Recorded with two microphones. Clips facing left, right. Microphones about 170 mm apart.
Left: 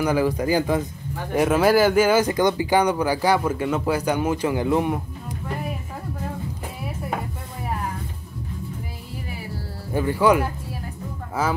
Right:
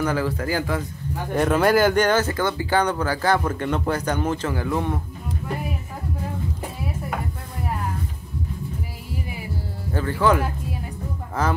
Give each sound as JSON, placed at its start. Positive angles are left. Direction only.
{"t": 0.0, "sound": "speech", "side_deg": 15}
{"t": 1.3, "sound": "speech", "side_deg": 5}
{"t": 9.9, "sound": "speech", "side_deg": 15}